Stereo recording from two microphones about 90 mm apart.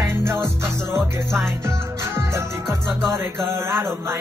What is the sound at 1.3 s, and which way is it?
Music, 5° left (ahead or behind).